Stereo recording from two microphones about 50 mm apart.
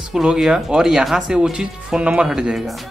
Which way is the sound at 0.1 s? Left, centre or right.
Centre.